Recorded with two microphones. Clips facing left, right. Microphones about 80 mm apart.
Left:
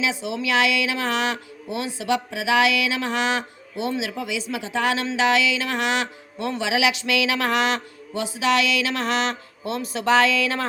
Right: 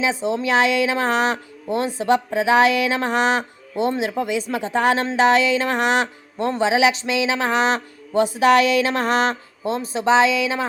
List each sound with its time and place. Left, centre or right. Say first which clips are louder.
0.0 s speech: right 4 dB; right; by 10.7 s centre